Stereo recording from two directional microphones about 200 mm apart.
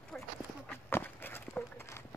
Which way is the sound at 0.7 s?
10° left (ahead or behind).